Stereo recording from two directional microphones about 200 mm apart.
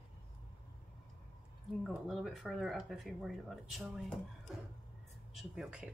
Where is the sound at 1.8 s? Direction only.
Centre (ahead or behind).